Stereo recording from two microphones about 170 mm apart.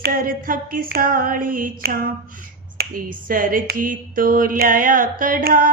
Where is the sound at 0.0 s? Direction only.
55° right (ahead or behind).